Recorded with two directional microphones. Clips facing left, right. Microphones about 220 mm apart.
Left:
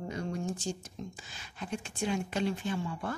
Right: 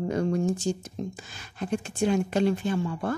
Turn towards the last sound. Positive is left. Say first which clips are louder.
# right 7 dB
turn(degrees=-50)  # may be behind; listen again after turning